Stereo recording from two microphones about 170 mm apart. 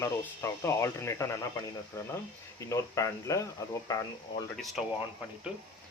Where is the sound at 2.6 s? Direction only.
20° left (ahead or behind).